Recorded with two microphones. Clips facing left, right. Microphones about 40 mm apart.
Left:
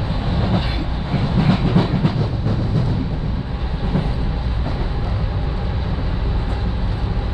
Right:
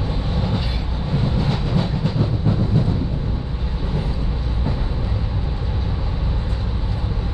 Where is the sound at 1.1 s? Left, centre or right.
Left.